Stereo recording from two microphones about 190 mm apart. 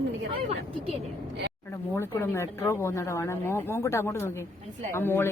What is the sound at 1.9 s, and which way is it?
A woman's voice, 10° left (ahead or behind).